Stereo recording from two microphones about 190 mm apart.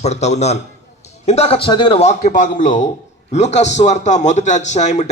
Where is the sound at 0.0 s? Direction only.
35° left (ahead or behind).